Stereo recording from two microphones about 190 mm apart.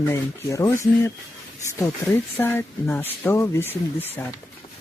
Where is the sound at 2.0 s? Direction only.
15° left (ahead or behind).